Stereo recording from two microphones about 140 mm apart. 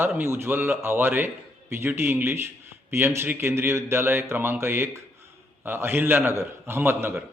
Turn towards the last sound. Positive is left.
turn(degrees=-15)  # may be behind; listen again after turning